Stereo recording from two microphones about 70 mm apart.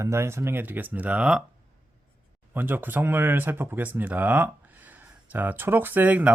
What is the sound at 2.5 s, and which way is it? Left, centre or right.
Speech, right.